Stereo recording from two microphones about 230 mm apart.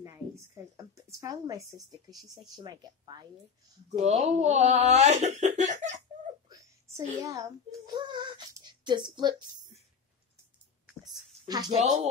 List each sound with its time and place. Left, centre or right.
0.7 s a woman's voice: centre
3.9 s speech: right
5.5 s laughter: right
6.5 s a sound: centre
11.4 s speech: centre
11.8 s laughter: right